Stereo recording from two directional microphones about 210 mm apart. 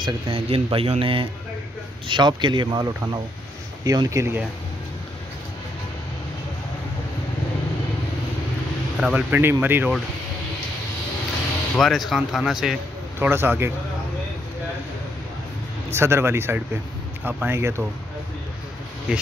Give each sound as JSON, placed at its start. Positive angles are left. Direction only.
{"t": 0.0, "sound": "speech", "side_deg": -25}
{"t": 8.9, "sound": "speech", "side_deg": -5}
{"t": 11.7, "sound": "speech", "side_deg": 0}
{"t": 15.9, "sound": "speech", "side_deg": -10}
{"t": 19.1, "sound": "speech", "side_deg": -5}